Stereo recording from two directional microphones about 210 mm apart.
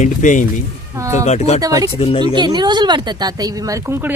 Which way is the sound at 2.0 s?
25° left (ahead or behind).